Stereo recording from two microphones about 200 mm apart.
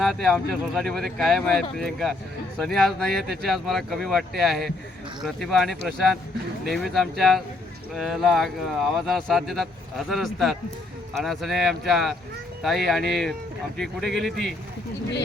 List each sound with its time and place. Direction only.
0.0 s speech: centre (ahead or behind)